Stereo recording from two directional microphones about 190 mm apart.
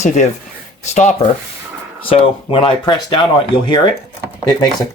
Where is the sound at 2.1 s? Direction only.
30° left (ahead or behind).